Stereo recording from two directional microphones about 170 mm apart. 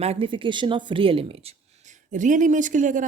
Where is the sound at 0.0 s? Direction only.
35° right (ahead or behind).